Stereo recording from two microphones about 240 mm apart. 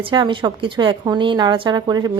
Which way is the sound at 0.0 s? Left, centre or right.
Centre.